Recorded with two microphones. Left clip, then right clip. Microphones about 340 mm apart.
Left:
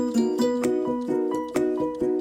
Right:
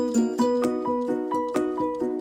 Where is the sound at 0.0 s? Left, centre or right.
Centre.